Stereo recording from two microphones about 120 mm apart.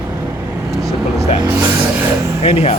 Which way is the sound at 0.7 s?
30° right (ahead or behind).